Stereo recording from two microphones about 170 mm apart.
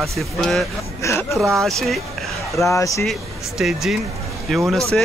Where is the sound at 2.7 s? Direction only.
20° left (ahead or behind).